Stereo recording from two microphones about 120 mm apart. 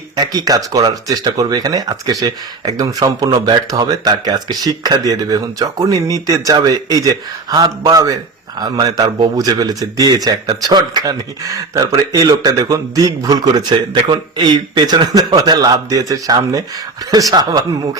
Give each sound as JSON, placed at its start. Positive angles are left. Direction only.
{"t": 0.2, "sound": "speech", "side_deg": -30}